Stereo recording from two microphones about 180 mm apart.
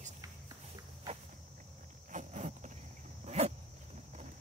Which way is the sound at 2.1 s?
40° right (ahead or behind).